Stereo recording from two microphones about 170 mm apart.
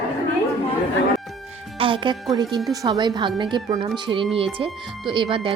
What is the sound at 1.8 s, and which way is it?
Music, 30° right (ahead or behind).